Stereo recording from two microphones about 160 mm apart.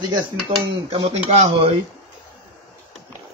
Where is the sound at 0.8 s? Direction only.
40° right (ahead or behind).